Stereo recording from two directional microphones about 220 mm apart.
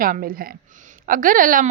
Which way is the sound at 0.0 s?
40° right (ahead or behind).